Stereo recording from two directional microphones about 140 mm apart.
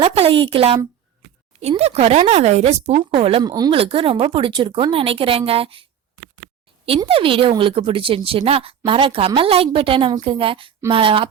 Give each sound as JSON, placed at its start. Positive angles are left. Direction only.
{"t": 0.0, "sound": "speech", "side_deg": -45}
{"t": 3.4, "sound": "speech", "side_deg": -30}
{"t": 3.7, "sound": "a woman's voice", "side_deg": -40}